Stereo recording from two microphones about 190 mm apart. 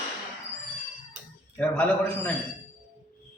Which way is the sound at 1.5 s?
5° left (ahead or behind).